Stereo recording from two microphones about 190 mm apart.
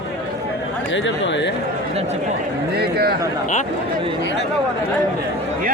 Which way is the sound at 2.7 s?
55° right (ahead or behind).